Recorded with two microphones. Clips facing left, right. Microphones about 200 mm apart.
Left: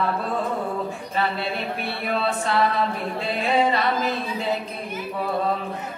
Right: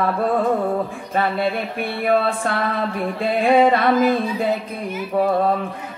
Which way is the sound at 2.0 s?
55° right (ahead or behind).